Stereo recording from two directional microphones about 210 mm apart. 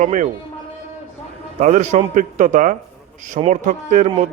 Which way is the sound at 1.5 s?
35° right (ahead or behind).